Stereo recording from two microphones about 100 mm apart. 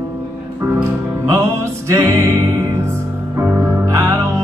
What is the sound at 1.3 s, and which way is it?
Music, 30° right (ahead or behind).